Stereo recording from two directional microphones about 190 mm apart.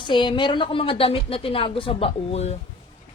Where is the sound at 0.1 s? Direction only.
25° left (ahead or behind).